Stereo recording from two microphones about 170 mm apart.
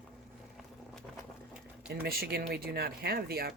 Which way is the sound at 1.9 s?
70° right (ahead or behind).